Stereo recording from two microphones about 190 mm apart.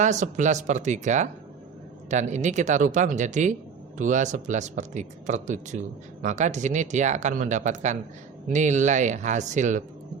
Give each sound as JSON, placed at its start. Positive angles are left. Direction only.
{"t": 0.0, "sound": "speech", "side_deg": -40}